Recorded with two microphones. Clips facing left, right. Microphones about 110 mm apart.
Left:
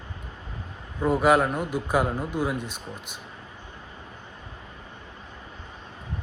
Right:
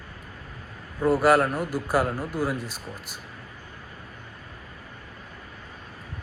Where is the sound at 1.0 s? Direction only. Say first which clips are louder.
Right 1 dB; 5° right (ahead or behind).